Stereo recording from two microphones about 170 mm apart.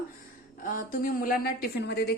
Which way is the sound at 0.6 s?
55° left (ahead or behind).